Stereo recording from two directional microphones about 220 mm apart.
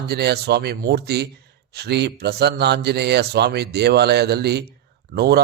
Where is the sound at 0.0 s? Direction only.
45° right (ahead or behind).